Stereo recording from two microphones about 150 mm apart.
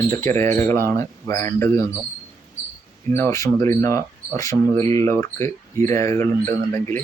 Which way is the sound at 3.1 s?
15° left (ahead or behind).